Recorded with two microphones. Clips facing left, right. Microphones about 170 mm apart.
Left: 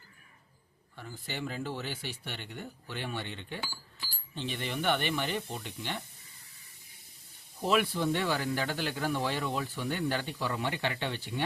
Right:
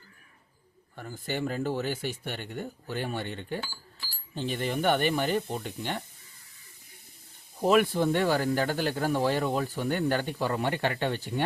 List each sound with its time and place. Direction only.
0.9 s speech: 50° right (ahead or behind)
7.6 s speech: 45° right (ahead or behind)